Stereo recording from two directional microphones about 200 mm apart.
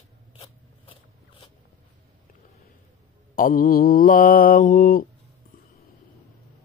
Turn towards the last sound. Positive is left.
turn(degrees=45)  # may be behind; listen again after turning